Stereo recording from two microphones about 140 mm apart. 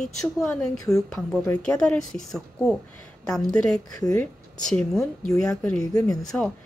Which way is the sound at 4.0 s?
20° left (ahead or behind).